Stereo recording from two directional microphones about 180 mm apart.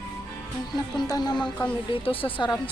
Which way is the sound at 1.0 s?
20° left (ahead or behind).